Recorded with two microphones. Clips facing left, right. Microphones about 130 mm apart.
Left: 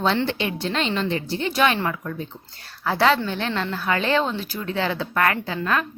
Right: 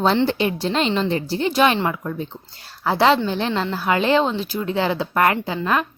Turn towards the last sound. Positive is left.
turn(degrees=-20)  # may be behind; listen again after turning